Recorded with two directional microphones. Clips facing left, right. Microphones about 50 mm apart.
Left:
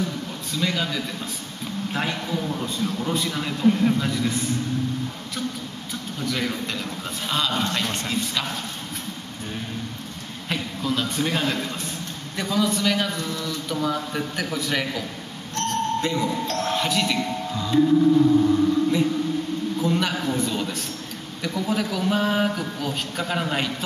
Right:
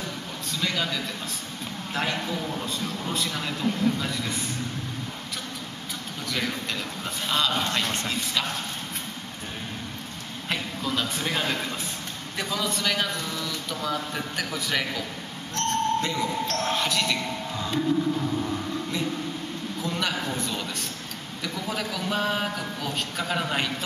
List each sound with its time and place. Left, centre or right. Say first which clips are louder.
0.6 s speech: left 3 dB; centre
2.2 s speech: left 3 dB; centre
3.6 s a man's voice: left 6 dB; left
4.0 s speech: left 5 dB; centre
6.2 s speech: left 3 dB; centre
10.5 s a man's voice: left 3 dB; centre